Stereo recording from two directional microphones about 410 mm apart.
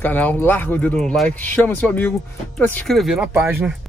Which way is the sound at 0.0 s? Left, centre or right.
Centre.